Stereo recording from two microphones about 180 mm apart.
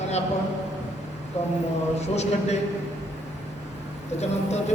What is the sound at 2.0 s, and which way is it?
Speech, 35° left (ahead or behind).